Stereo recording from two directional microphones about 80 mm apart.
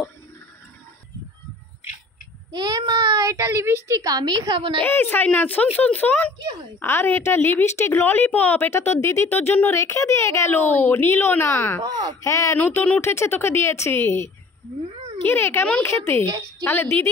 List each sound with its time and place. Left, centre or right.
2.5 s child singing: right
3.3 s a woman's voice: right
4.8 s a woman's voice: left
10.8 s a woman's voice: left
11.8 s a woman's voice: right
12.2 s a woman's voice: left